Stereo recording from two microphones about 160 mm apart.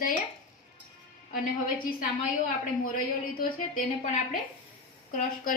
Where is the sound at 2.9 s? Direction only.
60° left (ahead or behind).